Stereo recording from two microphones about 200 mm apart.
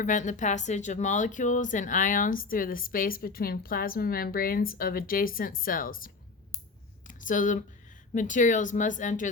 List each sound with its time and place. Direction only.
0.0 s a woman's voice: 40° left (ahead or behind)
7.1 s speech: 40° left (ahead or behind)